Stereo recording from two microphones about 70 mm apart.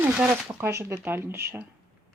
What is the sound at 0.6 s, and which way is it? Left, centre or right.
Speech, right.